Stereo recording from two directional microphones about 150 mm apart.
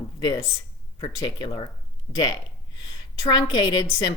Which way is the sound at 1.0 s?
30° left (ahead or behind).